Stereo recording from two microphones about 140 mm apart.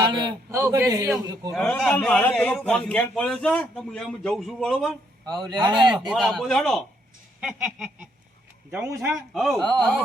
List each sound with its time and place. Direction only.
0.0 s a sound: 30° right (ahead or behind)
0.5 s a man's voice: 20° right (ahead or behind)
1.5 s a man's voice: 5° left (ahead or behind)
5.2 s speech: 30° right (ahead or behind)
6.1 s speech: centre (ahead or behind)
8.9 s a man's voice: 20° right (ahead or behind)
9.1 s speech: centre (ahead or behind)